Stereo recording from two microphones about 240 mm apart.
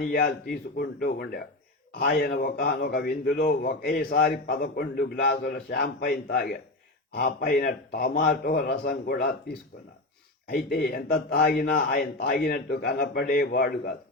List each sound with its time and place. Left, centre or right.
0.1 s speech: left
10.5 s speech: left